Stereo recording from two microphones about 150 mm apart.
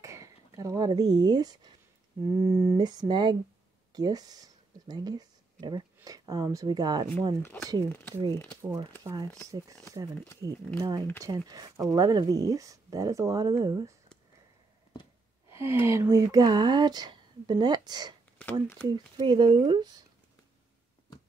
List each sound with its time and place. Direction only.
0.0 s speech: 20° right (ahead or behind)
8.7 s speech: 30° right (ahead or behind)
10.4 s speech: 25° right (ahead or behind)
15.5 s speech: 15° right (ahead or behind)
18.4 s speech: 15° left (ahead or behind)
18.9 s speech: 30° right (ahead or behind)